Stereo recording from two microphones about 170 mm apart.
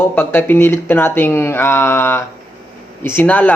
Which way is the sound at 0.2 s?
10° left (ahead or behind).